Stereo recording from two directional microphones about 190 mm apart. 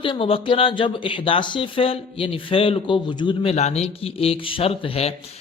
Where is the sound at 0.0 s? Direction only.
30° left (ahead or behind).